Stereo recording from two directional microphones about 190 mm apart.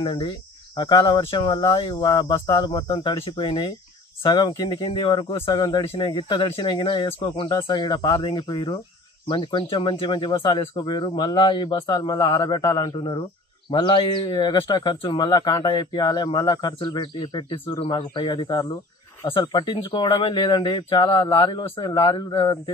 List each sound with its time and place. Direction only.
0.0 s speech: 25° left (ahead or behind)